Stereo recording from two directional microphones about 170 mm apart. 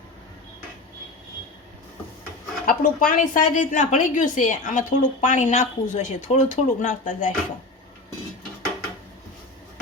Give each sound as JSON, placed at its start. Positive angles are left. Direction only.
{"t": 2.6, "sound": "a woman's voice", "side_deg": 50}